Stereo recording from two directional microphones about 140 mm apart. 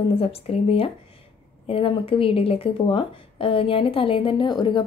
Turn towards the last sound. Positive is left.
turn(degrees=35)  # may be behind; listen again after turning